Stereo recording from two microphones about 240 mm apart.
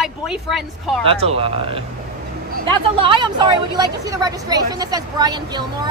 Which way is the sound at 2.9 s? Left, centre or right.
Right.